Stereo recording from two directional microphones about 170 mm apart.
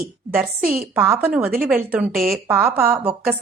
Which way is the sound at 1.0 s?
10° right (ahead or behind).